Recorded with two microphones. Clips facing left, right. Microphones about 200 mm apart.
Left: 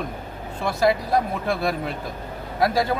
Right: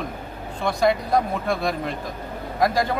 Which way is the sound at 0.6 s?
Centre (ahead or behind).